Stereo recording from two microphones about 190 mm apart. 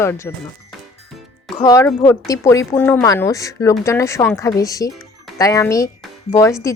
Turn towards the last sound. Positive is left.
turn(degrees=15)  # may be behind; listen again after turning